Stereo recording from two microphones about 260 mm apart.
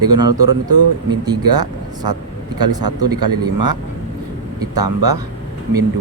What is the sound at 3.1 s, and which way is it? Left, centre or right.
Speech, centre.